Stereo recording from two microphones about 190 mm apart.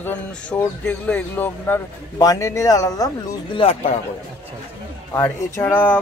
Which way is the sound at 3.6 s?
30° left (ahead or behind).